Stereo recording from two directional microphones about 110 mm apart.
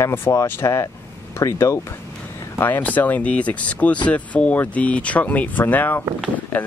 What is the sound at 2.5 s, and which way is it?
Speech, 15° left (ahead or behind).